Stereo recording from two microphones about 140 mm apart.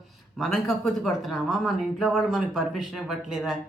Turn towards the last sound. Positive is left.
turn(degrees=-5)  # may be behind; listen again after turning